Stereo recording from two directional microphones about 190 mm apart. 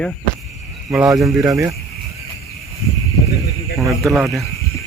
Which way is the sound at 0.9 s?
15° right (ahead or behind).